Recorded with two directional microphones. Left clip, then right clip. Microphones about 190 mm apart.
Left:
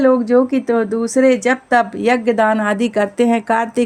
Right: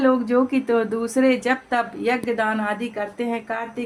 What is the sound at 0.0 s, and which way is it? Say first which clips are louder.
Speech: left 6 dB; 25° left (ahead or behind).